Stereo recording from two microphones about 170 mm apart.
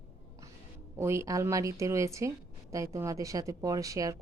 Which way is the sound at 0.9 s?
15° right (ahead or behind).